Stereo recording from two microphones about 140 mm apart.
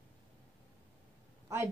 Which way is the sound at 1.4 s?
15° right (ahead or behind).